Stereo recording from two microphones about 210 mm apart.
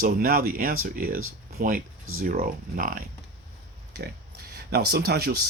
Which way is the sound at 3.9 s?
50° right (ahead or behind).